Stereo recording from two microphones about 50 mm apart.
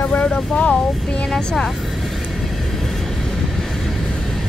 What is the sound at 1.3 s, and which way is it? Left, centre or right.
Speech, centre.